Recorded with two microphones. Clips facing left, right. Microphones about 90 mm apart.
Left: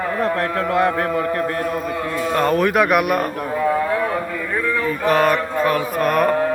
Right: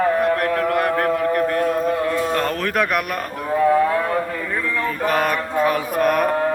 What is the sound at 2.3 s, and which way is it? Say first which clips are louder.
Speech: left 4 dB; 10° left (ahead or behind).